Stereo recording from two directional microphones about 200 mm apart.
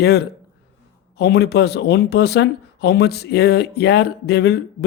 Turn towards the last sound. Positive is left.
turn(degrees=55)  # may be behind; listen again after turning